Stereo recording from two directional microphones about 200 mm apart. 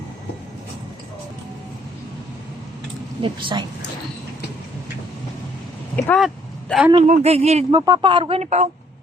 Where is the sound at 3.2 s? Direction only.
25° right (ahead or behind).